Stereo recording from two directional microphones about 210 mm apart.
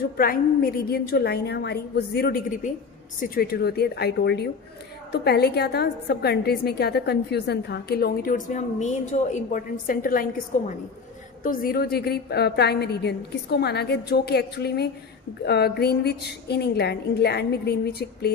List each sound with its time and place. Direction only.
0.2 s a woman's voice: 45° left (ahead or behind)
11.4 s a woman's voice: 45° left (ahead or behind)